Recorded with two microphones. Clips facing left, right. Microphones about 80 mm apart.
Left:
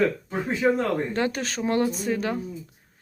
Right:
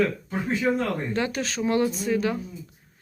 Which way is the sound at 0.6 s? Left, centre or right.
Left.